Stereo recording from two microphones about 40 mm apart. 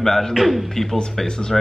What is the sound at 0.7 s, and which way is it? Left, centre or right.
Speech, centre.